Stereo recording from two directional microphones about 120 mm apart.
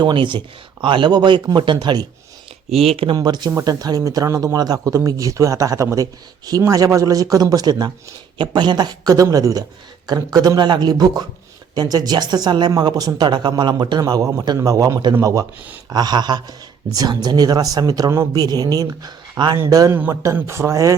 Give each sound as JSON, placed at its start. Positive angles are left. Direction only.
{"t": 0.0, "sound": "speech", "side_deg": -40}
{"t": 2.6, "sound": "speech", "side_deg": -55}
{"t": 3.2, "sound": "speech", "side_deg": -35}